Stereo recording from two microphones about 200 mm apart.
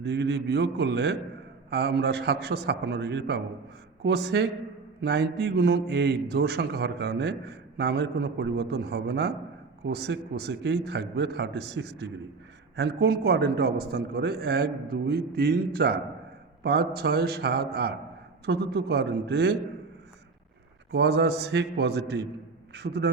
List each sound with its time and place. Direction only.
0.0 s a man's voice: 55° right (ahead or behind)
20.9 s a man's voice: 55° right (ahead or behind)